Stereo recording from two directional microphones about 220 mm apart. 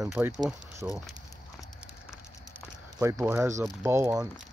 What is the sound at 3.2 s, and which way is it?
Speech, 10° right (ahead or behind).